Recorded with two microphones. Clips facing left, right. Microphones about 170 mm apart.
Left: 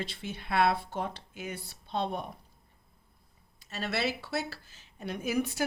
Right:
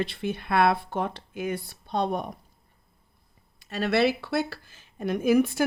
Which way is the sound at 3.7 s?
65° right (ahead or behind).